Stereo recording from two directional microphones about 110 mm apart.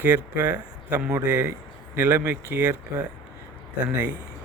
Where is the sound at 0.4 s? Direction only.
15° right (ahead or behind).